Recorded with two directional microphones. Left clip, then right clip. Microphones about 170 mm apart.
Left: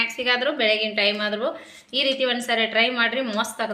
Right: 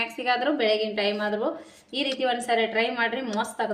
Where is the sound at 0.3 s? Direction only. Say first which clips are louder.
Left 1 dB; 35° right (ahead or behind).